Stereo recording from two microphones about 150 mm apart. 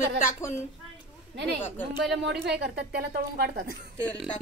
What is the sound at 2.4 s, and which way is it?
A woman's voice, 90° right.